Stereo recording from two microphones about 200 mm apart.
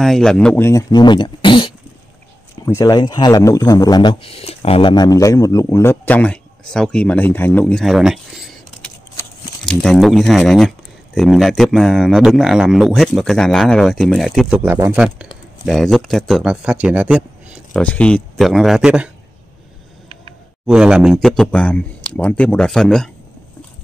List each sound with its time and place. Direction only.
0.0 s a man's voice: centre (ahead or behind)
20.6 s speech: 5° right (ahead or behind)